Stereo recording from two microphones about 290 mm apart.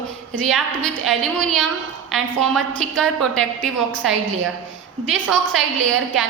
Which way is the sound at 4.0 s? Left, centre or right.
Right.